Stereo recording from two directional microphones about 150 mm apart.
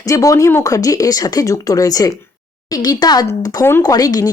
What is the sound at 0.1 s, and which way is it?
Speech, 20° left (ahead or behind).